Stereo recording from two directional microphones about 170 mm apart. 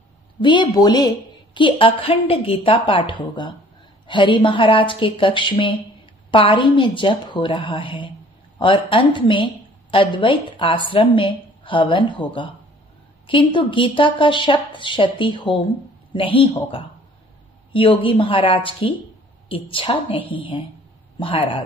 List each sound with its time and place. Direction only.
0.4 s a woman's voice: 25° left (ahead or behind)